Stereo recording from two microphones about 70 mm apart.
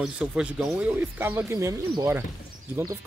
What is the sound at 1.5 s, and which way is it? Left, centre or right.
Speech, right.